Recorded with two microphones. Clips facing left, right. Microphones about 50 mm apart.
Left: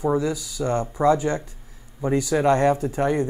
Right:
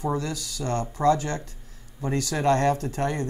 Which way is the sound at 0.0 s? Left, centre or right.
Centre.